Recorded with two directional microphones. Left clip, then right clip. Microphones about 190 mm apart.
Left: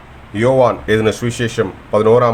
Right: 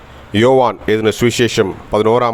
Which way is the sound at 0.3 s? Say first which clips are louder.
Right 1 dB; 50° right (ahead or behind).